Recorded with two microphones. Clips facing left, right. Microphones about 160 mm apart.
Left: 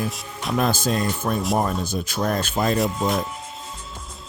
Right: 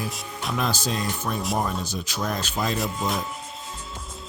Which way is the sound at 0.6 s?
50° left (ahead or behind).